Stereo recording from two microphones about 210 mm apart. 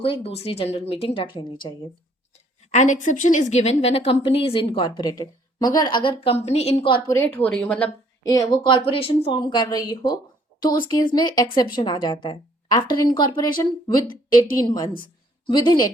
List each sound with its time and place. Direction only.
0.0 s a woman's voice: 25° left (ahead or behind)
2.7 s a woman's voice: 35° left (ahead or behind)
7.1 s speech: 10° left (ahead or behind)
8.3 s a woman's voice: 15° left (ahead or behind)